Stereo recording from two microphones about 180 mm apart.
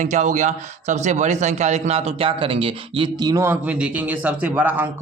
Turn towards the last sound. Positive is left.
turn(degrees=-10)  # may be behind; listen again after turning